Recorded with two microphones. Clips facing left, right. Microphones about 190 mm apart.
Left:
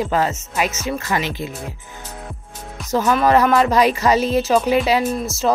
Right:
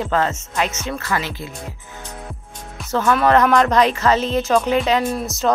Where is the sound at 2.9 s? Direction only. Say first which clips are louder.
Even; 5° left (ahead or behind).